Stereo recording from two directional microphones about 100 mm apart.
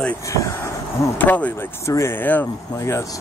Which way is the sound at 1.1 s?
15° left (ahead or behind).